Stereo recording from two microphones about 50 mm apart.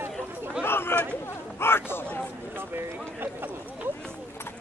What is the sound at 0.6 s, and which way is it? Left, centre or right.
Speech, left.